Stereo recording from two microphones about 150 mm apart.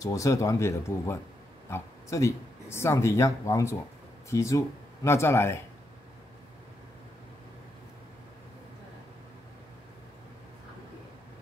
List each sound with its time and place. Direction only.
0.0 s speech: 20° left (ahead or behind)